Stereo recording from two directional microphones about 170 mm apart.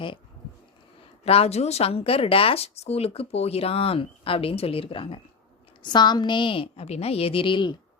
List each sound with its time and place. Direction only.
1.2 s a woman's voice: 35° left (ahead or behind)